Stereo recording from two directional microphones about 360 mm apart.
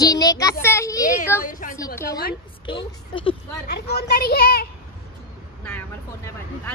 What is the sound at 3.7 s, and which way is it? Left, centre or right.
A woman's voice, left.